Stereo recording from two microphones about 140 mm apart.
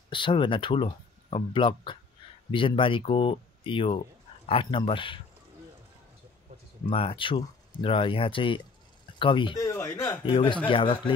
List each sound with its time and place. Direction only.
0.1 s speech: 35° left (ahead or behind)
6.9 s speech: 40° left (ahead or behind)
9.6 s speech: 20° left (ahead or behind)
10.2 s speech: 35° left (ahead or behind)